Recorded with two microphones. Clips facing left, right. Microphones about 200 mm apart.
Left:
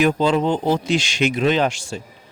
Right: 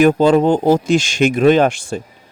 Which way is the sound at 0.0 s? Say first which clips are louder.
Right 6 dB; 50° right (ahead or behind).